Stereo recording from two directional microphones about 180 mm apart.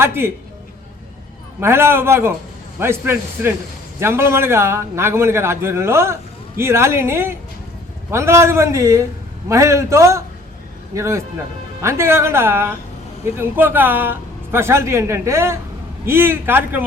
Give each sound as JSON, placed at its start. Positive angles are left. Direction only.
{"t": 0.0, "sound": "speech", "side_deg": -15}
{"t": 1.6, "sound": "speech", "side_deg": -15}